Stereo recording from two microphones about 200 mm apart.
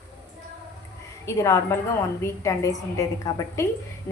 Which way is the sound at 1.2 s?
15° left (ahead or behind).